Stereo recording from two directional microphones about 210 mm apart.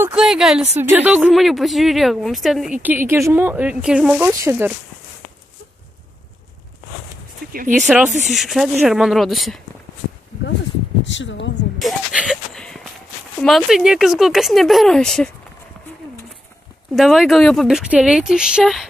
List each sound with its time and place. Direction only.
0.0 s speech: centre (ahead or behind)
7.5 s speech: 40° right (ahead or behind)
7.8 s speech: centre (ahead or behind)
11.1 s speech: 60° left (ahead or behind)
11.8 s a sound: centre (ahead or behind)
13.4 s speech: centre (ahead or behind)
16.9 s speech: centre (ahead or behind)